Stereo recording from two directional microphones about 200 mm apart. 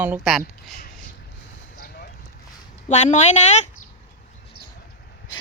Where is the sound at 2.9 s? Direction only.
35° left (ahead or behind).